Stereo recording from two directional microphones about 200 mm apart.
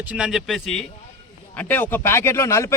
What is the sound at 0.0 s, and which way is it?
Speech, 5° right (ahead or behind).